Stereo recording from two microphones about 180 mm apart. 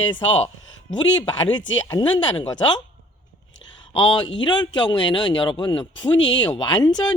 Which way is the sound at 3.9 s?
30° left (ahead or behind).